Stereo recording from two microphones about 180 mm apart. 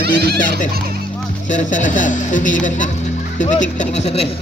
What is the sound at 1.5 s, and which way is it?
Speech, 45° left (ahead or behind).